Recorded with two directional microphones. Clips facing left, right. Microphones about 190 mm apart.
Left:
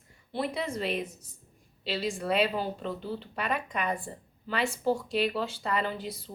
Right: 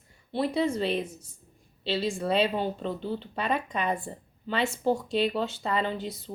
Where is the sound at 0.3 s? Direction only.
30° right (ahead or behind).